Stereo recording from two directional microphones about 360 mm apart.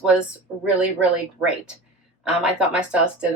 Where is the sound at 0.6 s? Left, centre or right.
Centre.